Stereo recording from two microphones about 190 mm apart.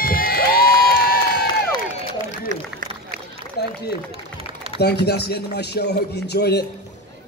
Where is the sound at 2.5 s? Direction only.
45° right (ahead or behind).